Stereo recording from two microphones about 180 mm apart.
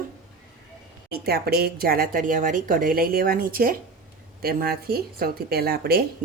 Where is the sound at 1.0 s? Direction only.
60° right (ahead or behind).